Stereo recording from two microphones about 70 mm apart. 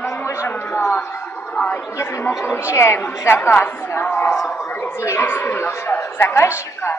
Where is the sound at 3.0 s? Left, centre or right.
Left.